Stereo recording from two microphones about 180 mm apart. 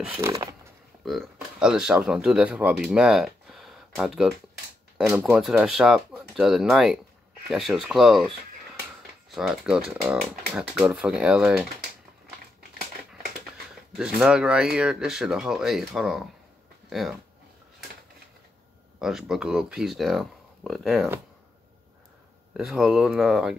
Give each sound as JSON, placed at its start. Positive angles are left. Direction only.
{"t": 0.0, "sound": "speech", "side_deg": -10}
{"t": 1.0, "sound": "speech", "side_deg": 0}
{"t": 9.3, "sound": "speech", "side_deg": 0}
{"t": 13.7, "sound": "speech", "side_deg": -5}
{"t": 18.9, "sound": "speech", "side_deg": 0}
{"t": 22.6, "sound": "speech", "side_deg": 0}